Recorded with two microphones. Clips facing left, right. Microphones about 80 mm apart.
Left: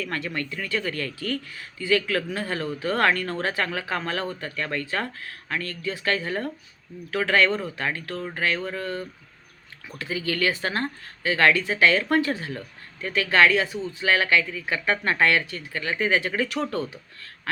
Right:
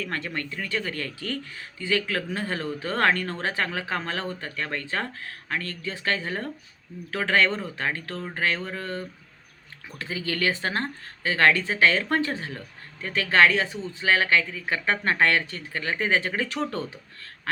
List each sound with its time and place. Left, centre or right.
0.0 s speech: right